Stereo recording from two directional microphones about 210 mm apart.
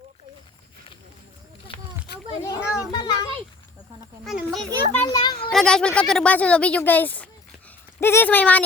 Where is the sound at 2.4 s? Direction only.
15° left (ahead or behind).